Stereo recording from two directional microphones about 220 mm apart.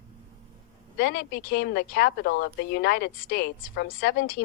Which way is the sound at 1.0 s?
45° left (ahead or behind).